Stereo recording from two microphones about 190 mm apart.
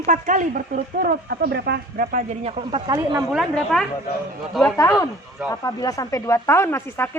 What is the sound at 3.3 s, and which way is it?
Speech, 5° left (ahead or behind).